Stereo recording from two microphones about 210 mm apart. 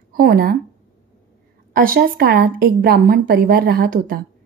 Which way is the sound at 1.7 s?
45° right (ahead or behind).